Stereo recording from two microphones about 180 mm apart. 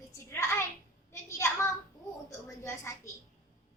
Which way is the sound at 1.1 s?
15° left (ahead or behind).